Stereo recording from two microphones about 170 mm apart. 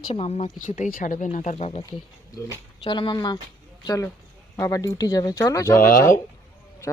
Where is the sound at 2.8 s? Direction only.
30° left (ahead or behind).